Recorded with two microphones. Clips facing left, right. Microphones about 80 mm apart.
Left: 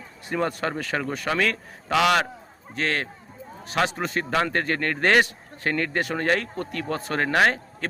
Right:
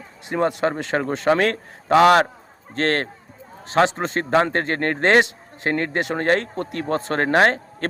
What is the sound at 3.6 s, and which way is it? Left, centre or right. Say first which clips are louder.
A man's voice: right 6 dB; right.